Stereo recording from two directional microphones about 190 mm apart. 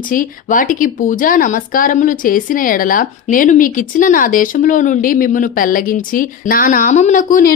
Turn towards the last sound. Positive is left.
turn(degrees=45)  # may be behind; listen again after turning